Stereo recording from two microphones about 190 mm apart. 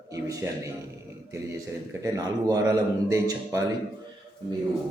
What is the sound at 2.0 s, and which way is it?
A man's voice, 20° right (ahead or behind).